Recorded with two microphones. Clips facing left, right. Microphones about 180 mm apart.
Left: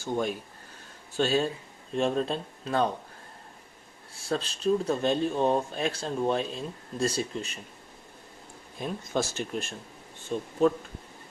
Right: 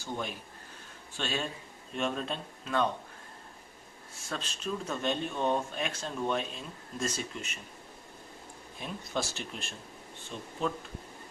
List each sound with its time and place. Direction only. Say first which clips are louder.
0.0 s speech: left 8 dB; 45° left (ahead or behind)
4.1 s speech: left 8 dB; 35° left (ahead or behind)
8.8 s speech: left 6 dB; 45° left (ahead or behind)